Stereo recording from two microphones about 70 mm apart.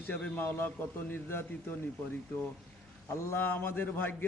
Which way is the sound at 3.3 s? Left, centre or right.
Left.